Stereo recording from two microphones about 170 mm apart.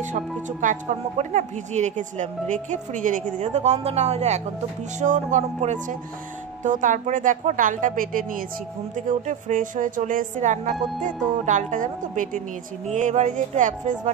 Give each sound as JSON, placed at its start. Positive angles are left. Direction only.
{"t": 0.0, "sound": "speech", "side_deg": -45}